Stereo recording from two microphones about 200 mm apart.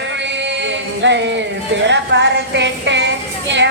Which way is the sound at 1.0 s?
60° right (ahead or behind).